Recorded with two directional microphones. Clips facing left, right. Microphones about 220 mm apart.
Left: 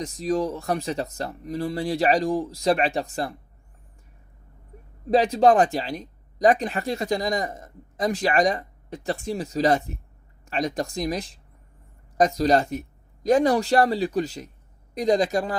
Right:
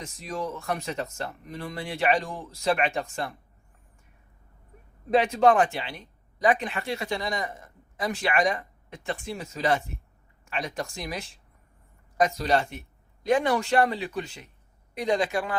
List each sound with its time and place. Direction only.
0.0 s speech: 35° left (ahead or behind)
5.1 s speech: 35° left (ahead or behind)